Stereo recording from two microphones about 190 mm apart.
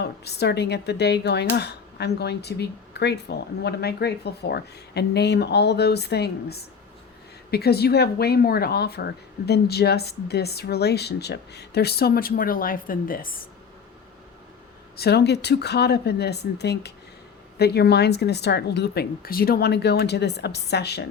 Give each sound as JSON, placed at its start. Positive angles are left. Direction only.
{"t": 0.0, "sound": "speech", "side_deg": 60}
{"t": 14.9, "sound": "speech", "side_deg": 60}